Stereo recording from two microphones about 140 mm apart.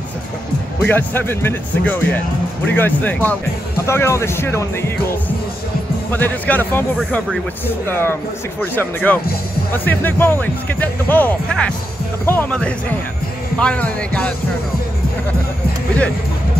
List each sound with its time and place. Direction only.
0.8 s speech: 15° left (ahead or behind)
6.1 s speech: 10° left (ahead or behind)
7.9 s speech: 15° left (ahead or behind)